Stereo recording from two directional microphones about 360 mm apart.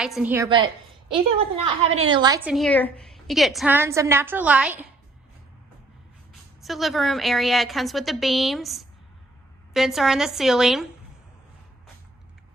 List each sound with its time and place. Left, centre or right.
0.2 s a woman's voice: centre
6.6 s a woman's voice: centre